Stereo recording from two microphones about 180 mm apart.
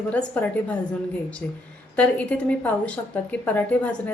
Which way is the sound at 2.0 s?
5° left (ahead or behind).